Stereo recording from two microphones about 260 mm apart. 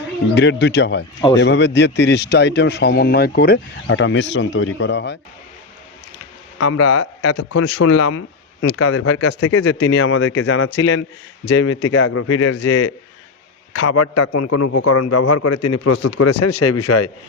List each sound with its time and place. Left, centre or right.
0.3 s a man's voice: left
6.6 s a man's voice: left
13.8 s a man's voice: left